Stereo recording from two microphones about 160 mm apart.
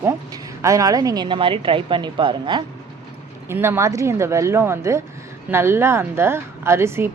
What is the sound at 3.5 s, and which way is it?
A woman's voice, 15° right (ahead or behind).